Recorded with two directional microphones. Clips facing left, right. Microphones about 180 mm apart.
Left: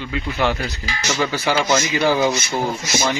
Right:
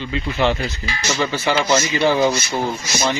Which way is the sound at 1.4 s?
Centre (ahead or behind).